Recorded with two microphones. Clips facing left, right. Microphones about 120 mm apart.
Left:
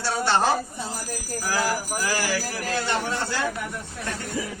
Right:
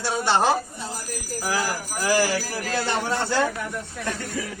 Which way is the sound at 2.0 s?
30° right (ahead or behind).